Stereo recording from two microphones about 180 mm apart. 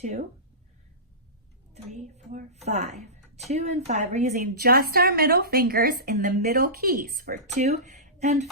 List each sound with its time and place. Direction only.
0.0 s a woman's voice: 40° right (ahead or behind)
1.7 s a woman's voice: 40° right (ahead or behind)
4.5 s a woman's voice: 60° right (ahead or behind); by 7.8 s 40° right (ahead or behind)
7.9 s a sound: 40° right (ahead or behind)